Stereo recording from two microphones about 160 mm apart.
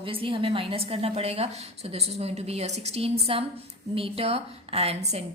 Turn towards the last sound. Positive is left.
turn(degrees=-40)  # may be behind; listen again after turning